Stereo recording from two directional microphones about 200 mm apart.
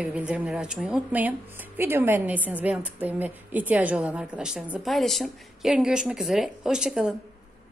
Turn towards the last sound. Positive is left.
turn(degrees=-5)  # may be behind; listen again after turning